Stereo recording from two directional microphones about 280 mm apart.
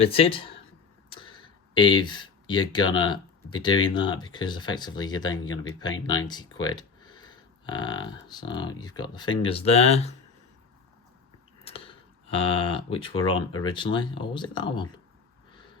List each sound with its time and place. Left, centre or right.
0.0 s speech: centre
11.6 s speech: centre